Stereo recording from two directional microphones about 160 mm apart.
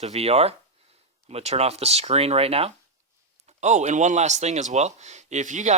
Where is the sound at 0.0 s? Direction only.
40° right (ahead or behind).